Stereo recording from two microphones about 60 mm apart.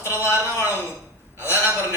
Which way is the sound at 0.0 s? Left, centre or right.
Left.